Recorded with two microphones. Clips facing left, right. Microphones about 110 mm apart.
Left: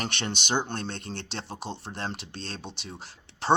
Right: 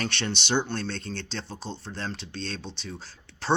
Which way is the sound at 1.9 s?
20° left (ahead or behind).